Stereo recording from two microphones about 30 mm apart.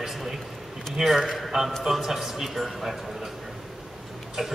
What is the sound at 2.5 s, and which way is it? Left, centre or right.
Speech, centre.